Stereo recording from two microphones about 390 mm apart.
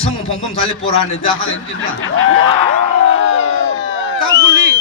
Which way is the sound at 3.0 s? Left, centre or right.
Left.